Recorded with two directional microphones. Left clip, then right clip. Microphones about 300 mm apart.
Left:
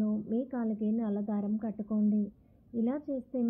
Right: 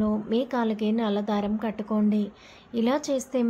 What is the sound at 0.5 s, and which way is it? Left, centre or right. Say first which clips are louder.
A woman's voice: right 8 dB; centre.